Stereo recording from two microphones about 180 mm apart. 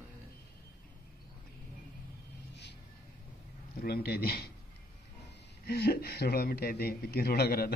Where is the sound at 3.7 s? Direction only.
60° left (ahead or behind).